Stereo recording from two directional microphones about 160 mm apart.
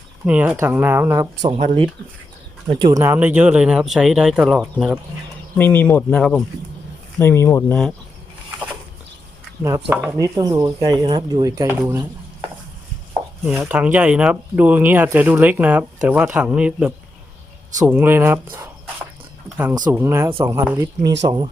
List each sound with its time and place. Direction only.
0.3 s speech: 10° right (ahead or behind)
1.5 s speech: 35° right (ahead or behind)
3.0 s speech: 10° right (ahead or behind)
5.5 s speech: 10° left (ahead or behind)
9.9 s speech: 10° right (ahead or behind)
10.2 s speech: 20° right (ahead or behind)
13.4 s speech: 10° right (ahead or behind)
19.9 s speech: 15° right (ahead or behind)